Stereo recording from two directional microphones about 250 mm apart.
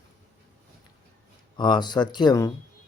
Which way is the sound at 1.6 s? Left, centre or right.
Centre.